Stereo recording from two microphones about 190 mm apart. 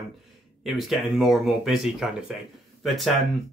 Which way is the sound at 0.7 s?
Centre (ahead or behind).